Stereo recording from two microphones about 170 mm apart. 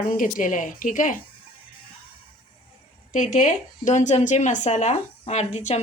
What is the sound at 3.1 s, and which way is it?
Speech, 50° left (ahead or behind).